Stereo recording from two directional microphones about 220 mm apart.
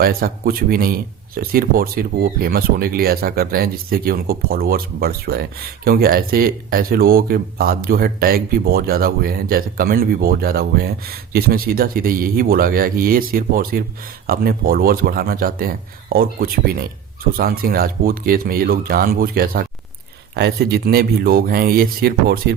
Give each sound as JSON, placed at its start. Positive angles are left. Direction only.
{"t": 0.0, "sound": "speech", "side_deg": -45}